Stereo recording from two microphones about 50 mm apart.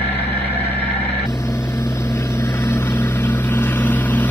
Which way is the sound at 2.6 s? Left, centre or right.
Left.